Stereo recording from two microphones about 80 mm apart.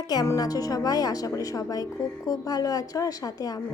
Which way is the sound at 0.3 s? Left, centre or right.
Left.